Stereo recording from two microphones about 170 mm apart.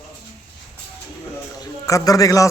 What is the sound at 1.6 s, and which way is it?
Speech, 20° left (ahead or behind).